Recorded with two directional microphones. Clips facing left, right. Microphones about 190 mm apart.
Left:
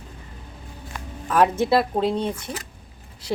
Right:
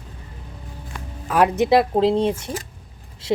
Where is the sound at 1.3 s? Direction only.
15° right (ahead or behind).